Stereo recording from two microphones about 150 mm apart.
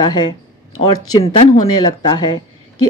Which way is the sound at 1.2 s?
40° left (ahead or behind).